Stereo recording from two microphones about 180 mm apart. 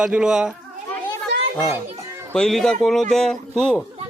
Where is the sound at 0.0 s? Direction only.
5° right (ahead or behind).